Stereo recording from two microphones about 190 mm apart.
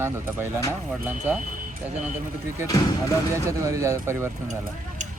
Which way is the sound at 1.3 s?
10° right (ahead or behind).